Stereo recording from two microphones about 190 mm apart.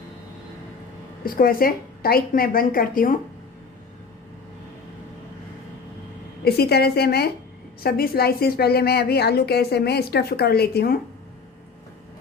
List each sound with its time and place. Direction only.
1.2 s a woman's voice: 50° left (ahead or behind)
6.4 s a woman's voice: 55° left (ahead or behind)